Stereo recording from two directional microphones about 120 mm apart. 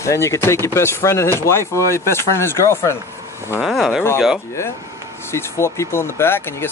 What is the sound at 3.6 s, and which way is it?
Speech, centre (ahead or behind).